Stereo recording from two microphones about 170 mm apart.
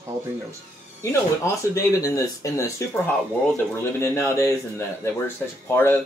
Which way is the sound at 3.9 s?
15° left (ahead or behind).